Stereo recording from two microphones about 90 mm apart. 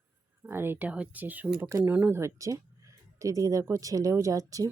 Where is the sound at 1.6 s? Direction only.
30° right (ahead or behind).